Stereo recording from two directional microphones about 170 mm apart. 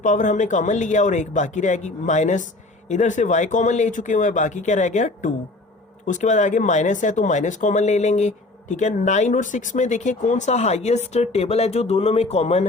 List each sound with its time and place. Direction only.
0.0 s speech: 50° left (ahead or behind)